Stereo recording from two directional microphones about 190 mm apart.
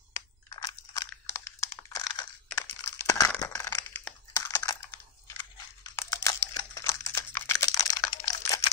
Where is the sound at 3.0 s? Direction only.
15° left (ahead or behind).